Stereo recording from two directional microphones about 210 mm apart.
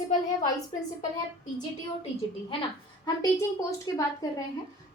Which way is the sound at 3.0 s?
15° left (ahead or behind).